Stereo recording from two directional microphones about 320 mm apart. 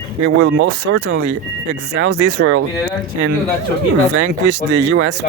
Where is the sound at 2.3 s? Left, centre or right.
Right.